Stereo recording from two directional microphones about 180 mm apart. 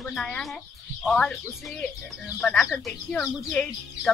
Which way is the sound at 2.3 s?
10° left (ahead or behind).